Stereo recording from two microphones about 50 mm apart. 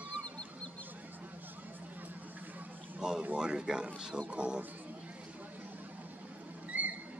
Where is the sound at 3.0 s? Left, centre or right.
Centre.